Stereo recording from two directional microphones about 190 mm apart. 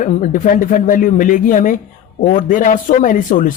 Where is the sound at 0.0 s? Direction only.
40° left (ahead or behind).